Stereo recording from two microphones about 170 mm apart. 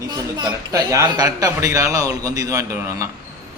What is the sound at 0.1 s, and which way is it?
Speech, 25° right (ahead or behind).